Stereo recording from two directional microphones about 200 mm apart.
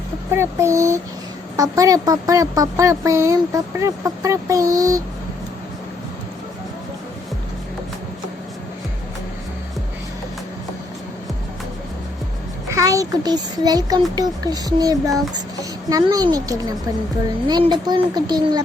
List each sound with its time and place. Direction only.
0.3 s a woman's voice: 15° right (ahead or behind)
12.7 s a child's voice: 15° right (ahead or behind)